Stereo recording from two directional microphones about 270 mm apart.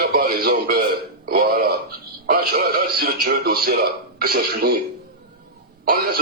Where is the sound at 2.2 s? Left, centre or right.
Right.